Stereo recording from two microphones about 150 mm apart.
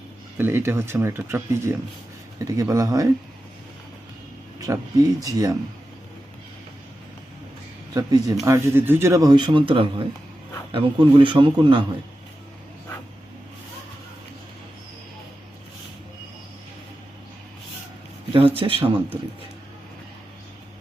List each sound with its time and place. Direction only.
0.3 s speech: 15° right (ahead or behind)
4.7 s speech: 20° right (ahead or behind)
7.9 s a man's voice: 25° right (ahead or behind)
18.3 s a man's voice: 35° right (ahead or behind)